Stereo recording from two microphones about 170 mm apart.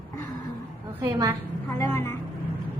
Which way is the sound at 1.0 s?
15° right (ahead or behind).